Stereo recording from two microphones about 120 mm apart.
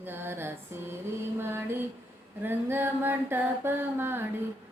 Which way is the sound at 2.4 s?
15° right (ahead or behind).